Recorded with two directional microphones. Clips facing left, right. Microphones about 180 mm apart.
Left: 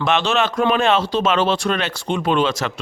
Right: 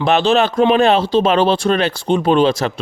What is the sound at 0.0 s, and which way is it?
Speech, 35° right (ahead or behind).